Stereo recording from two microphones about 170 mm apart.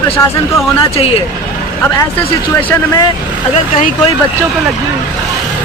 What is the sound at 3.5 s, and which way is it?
Speech, 40° left (ahead or behind).